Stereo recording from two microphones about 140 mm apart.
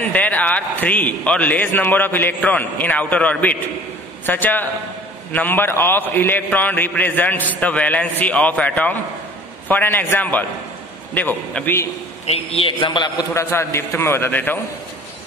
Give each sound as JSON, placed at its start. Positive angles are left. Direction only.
{"t": 0.0, "sound": "a man's voice", "side_deg": 10}
{"t": 12.3, "sound": "a man's voice", "side_deg": 45}
{"t": 13.3, "sound": "a man's voice", "side_deg": 20}